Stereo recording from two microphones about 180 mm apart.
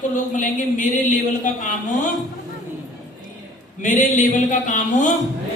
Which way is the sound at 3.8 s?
45° left (ahead or behind).